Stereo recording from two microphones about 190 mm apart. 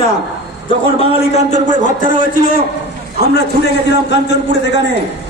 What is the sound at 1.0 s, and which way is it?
A man's voice, 35° left (ahead or behind).